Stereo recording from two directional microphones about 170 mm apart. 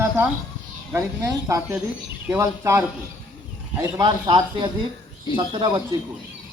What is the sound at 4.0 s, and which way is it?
Speech, 25° right (ahead or behind).